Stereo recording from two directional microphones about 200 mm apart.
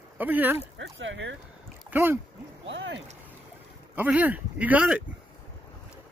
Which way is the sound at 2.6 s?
65° right (ahead or behind).